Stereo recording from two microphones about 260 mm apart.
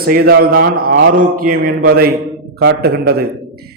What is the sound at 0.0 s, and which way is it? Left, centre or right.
A man's voice, right.